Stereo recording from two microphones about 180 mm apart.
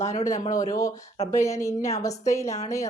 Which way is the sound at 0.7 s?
20° left (ahead or behind).